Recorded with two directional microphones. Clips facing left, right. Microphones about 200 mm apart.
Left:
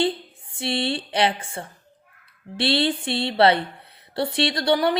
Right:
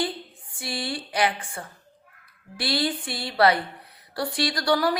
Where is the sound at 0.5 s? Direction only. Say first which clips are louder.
Left 6 dB; 25° left (ahead or behind).